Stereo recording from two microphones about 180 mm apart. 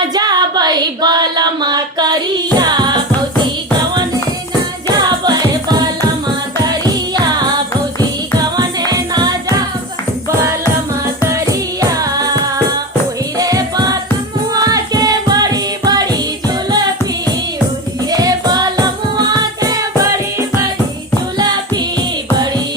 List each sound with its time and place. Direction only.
0.1 s female singing: 20° right (ahead or behind)
4.9 s music: 20° right (ahead or behind)
6.7 s music: 20° right (ahead or behind)
8.5 s music: 20° right (ahead or behind)
11.3 s music: 20° right (ahead or behind)
13.4 s music: 20° right (ahead or behind)
18.1 s music: 20° right (ahead or behind)